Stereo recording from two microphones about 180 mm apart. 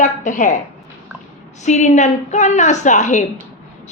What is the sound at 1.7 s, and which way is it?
A woman's voice, 40° left (ahead or behind).